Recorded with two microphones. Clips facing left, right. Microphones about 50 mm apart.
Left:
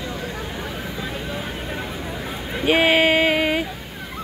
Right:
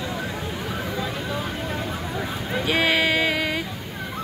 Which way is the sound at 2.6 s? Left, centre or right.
Left.